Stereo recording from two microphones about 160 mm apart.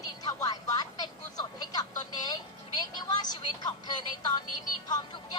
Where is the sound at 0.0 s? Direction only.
20° left (ahead or behind).